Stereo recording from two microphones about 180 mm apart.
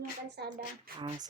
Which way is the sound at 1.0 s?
25° right (ahead or behind).